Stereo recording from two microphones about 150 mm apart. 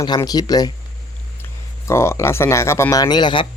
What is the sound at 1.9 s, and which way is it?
Speech, 20° left (ahead or behind).